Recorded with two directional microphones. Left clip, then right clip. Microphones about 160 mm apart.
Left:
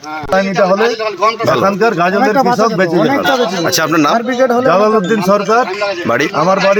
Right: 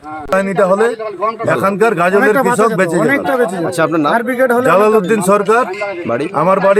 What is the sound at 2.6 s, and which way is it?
Speech, 25° right (ahead or behind).